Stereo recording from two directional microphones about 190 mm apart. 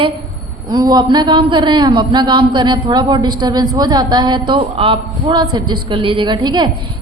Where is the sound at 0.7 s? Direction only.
20° right (ahead or behind).